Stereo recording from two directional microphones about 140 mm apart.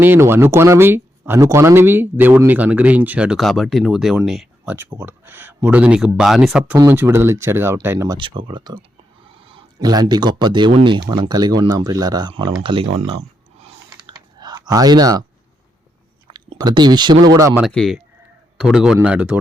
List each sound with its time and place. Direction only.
0.0 s speech: 15° right (ahead or behind)
6.7 s speech: 20° right (ahead or behind)
8.2 s speech: 35° right (ahead or behind)
9.4 s a sound: 40° right (ahead or behind)
9.8 s speech: 30° right (ahead or behind); by 13.2 s 45° right (ahead or behind)
14.1 s clicking: 30° right (ahead or behind)
16.6 s speech: 30° right (ahead or behind)
17.7 s a man's voice: 5° left (ahead or behind)